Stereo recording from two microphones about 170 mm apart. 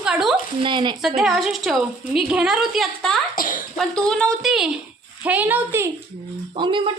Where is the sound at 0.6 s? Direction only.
30° right (ahead or behind).